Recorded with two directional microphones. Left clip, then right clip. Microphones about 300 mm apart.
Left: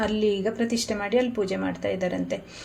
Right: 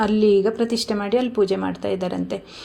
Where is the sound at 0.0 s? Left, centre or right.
Right.